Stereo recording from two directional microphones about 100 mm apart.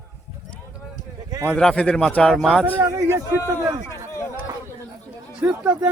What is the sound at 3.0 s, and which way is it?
A man's voice, 30° right (ahead or behind).